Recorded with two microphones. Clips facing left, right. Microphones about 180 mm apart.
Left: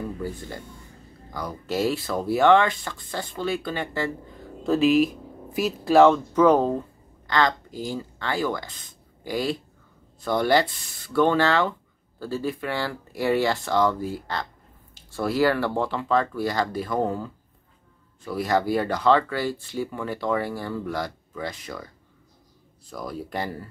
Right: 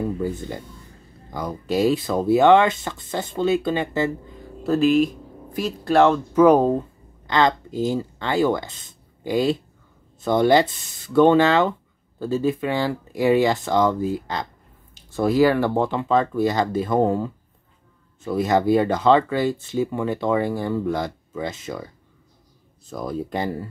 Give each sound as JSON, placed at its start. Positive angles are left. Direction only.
{"t": 0.2, "sound": "speech", "side_deg": -20}
{"t": 4.6, "sound": "speech", "side_deg": 0}
{"t": 22.8, "sound": "speech", "side_deg": -25}